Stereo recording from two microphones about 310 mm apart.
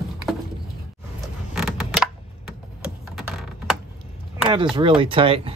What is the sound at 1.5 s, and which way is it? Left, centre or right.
Creak, centre.